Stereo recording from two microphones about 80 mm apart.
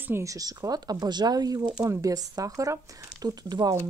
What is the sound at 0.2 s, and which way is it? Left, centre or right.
Speech, right.